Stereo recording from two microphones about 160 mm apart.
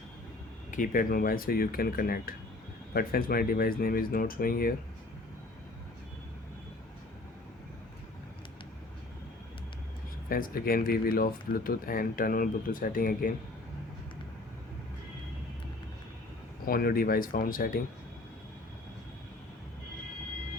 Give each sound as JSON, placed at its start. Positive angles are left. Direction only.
{"t": 0.7, "sound": "speech", "side_deg": 60}
{"t": 10.2, "sound": "speech", "side_deg": 65}
{"t": 16.6, "sound": "speech", "side_deg": 65}